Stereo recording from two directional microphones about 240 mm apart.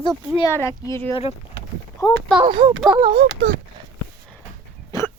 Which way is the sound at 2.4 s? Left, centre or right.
Right.